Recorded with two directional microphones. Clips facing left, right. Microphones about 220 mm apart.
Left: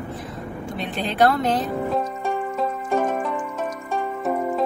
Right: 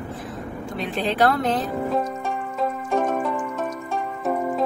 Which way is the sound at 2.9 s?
Centre (ahead or behind).